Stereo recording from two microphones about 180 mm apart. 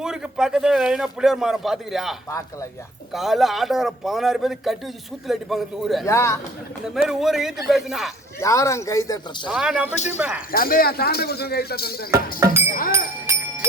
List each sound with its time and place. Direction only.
0.0 s a man's voice: 5° right (ahead or behind)
6.1 s speech: 15° left (ahead or behind)
6.8 s a man's voice: centre (ahead or behind)
8.4 s speech: 15° left (ahead or behind)
9.5 s a man's voice: 5° right (ahead or behind)
10.5 s speech: 55° left (ahead or behind)
12.1 s speech: 15° right (ahead or behind)
12.9 s music: 15° right (ahead or behind)